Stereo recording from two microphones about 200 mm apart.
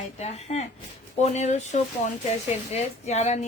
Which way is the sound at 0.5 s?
35° left (ahead or behind).